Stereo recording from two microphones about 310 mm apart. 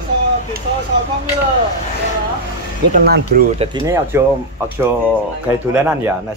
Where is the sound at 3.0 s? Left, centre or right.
Right.